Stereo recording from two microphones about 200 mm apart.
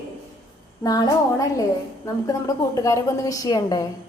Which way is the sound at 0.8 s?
20° left (ahead or behind).